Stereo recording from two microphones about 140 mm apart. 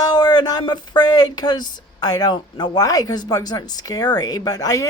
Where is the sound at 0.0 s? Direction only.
30° left (ahead or behind).